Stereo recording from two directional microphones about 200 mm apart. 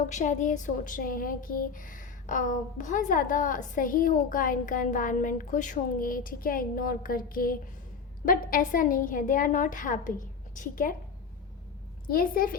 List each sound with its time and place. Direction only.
0.1 s speech: 40° left (ahead or behind)
12.0 s a woman's voice: 45° left (ahead or behind)